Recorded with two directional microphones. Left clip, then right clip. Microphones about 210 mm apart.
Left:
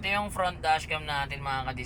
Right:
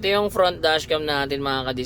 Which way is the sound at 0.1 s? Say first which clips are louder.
Right 10 dB; 35° right (ahead or behind).